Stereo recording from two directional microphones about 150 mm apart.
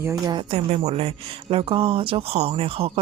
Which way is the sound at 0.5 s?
45° right (ahead or behind).